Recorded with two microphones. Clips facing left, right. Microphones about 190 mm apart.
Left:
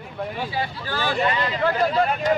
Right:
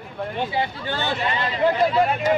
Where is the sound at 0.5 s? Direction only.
25° right (ahead or behind).